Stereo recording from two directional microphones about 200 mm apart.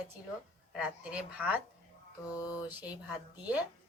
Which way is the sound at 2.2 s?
20° left (ahead or behind).